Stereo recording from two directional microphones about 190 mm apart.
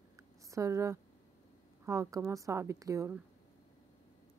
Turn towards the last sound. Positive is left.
turn(degrees=-15)  # may be behind; listen again after turning